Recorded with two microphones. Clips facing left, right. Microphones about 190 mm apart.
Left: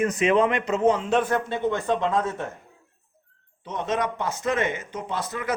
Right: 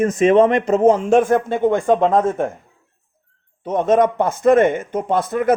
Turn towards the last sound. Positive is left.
turn(degrees=-55)  # may be behind; listen again after turning